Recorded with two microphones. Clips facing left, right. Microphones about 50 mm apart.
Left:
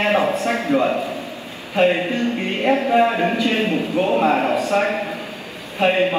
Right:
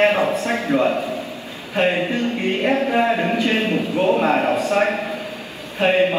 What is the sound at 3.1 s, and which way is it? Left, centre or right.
Speech, left.